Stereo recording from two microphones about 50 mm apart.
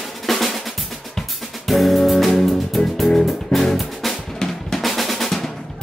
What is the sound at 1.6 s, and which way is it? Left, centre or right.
Music, centre.